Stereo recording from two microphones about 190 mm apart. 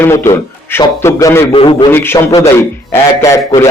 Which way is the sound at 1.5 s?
30° left (ahead or behind).